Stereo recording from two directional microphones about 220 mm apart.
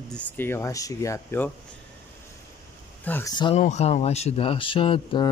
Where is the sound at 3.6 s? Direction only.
30° left (ahead or behind).